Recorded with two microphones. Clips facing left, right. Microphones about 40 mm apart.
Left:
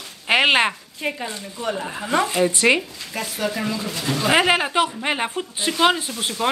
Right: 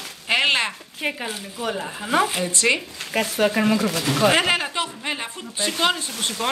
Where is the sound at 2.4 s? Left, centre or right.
Centre.